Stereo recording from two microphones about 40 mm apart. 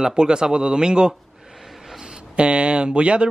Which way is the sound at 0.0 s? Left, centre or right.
Right.